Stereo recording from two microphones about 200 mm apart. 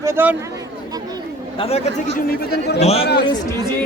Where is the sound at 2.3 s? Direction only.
50° left (ahead or behind).